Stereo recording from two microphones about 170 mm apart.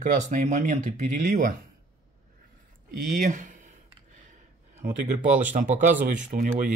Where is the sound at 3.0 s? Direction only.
50° right (ahead or behind).